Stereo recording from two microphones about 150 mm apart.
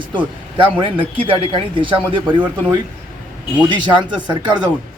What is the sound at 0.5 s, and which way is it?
A man's voice, 35° right (ahead or behind).